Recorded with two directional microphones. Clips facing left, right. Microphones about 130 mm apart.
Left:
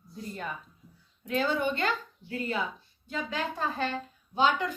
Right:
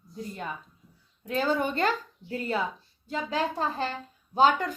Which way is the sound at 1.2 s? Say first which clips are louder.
Right 1 dB; 40° right (ahead or behind).